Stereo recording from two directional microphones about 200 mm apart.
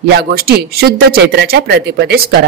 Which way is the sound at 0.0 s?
50° right (ahead or behind).